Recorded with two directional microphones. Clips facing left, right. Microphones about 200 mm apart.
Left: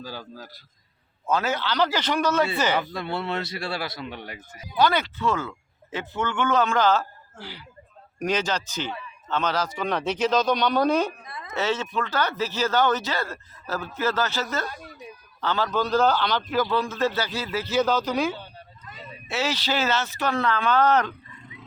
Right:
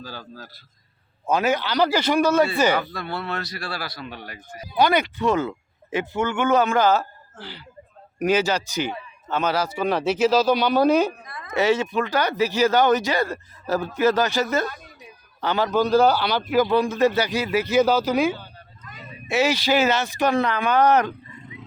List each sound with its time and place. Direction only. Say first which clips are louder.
0.0 s a man's voice: even; 15° left (ahead or behind)
1.3 s speech: right 4 dB; 15° right (ahead or behind)
2.7 s speech: even; 25° left (ahead or behind)
4.8 s speech: right 3 dB; 15° right (ahead or behind)
7.3 s a man's voice: right 1 dB; 10° left (ahead or behind)
8.2 s speech: right 5 dB; 5° right (ahead or behind)
11.3 s a sound: even; 25° left (ahead or behind)
11.5 s speech: right 6 dB; 10° right (ahead or behind)